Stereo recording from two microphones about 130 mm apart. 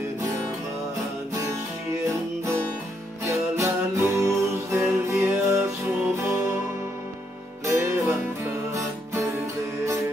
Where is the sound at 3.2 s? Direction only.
20° right (ahead or behind).